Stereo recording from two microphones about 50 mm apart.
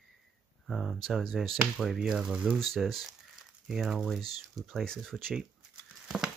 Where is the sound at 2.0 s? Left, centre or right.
Centre.